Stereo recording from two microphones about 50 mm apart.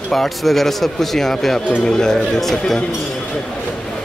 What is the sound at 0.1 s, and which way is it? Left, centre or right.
Speech, centre.